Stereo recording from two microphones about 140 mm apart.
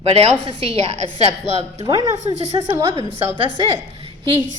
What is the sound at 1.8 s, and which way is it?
Speech, 25° right (ahead or behind).